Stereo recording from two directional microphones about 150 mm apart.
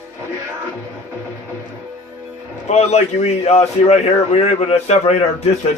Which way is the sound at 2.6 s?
45° left (ahead or behind).